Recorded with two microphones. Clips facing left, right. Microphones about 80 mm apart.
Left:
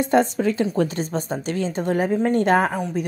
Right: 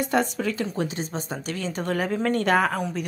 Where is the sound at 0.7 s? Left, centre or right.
Left.